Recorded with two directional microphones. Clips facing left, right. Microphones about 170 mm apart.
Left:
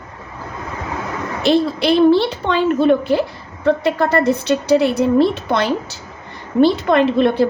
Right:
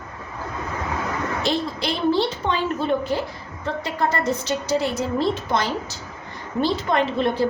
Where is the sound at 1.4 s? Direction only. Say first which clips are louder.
Left 12 dB; 65° left (ahead or behind).